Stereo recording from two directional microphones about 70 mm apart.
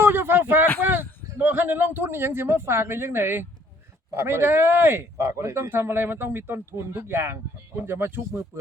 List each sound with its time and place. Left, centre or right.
0.0 s a sound: right
1.4 s a man's voice: right
5.6 s a man's voice: right